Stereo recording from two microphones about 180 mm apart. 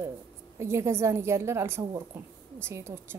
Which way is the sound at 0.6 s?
15° right (ahead or behind).